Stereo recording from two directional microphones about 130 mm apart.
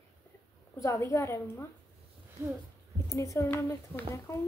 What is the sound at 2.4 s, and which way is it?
Speech, 15° right (ahead or behind).